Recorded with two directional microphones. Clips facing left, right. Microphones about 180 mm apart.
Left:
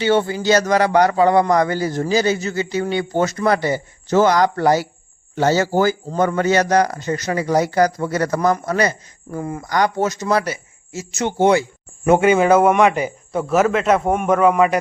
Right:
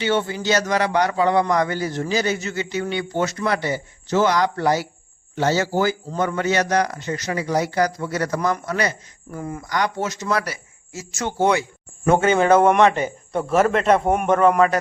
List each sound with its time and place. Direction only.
0.0 s a man's voice: 35° left (ahead or behind)
10.4 s speech: 20° left (ahead or behind)
12.2 s a man's voice: 10° left (ahead or behind)